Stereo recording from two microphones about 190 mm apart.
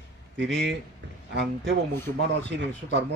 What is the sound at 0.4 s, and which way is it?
Speech, 70° right (ahead or behind).